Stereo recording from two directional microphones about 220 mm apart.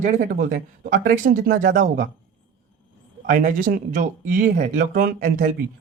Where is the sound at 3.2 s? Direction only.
40° right (ahead or behind).